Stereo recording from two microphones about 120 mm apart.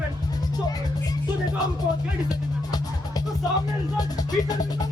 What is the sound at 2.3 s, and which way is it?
Speech, 35° left (ahead or behind).